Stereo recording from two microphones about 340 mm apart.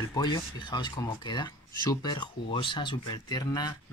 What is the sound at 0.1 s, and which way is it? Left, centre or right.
Speech, centre.